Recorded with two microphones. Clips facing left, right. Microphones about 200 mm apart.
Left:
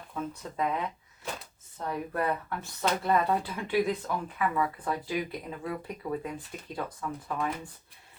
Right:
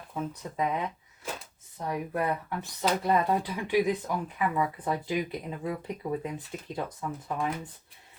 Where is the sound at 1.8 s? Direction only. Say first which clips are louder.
Right 1 dB; 15° right (ahead or behind).